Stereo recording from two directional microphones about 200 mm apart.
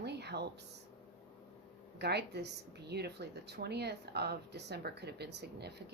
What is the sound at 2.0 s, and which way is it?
A woman's voice, 55° right (ahead or behind).